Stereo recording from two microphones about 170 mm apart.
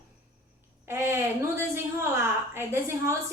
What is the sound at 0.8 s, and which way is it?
A woman's voice, 15° right (ahead or behind).